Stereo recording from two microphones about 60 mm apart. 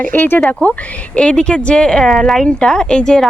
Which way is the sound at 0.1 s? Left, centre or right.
Left.